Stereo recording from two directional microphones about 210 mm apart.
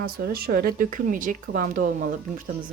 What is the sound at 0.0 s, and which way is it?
Speech, 45° right (ahead or behind).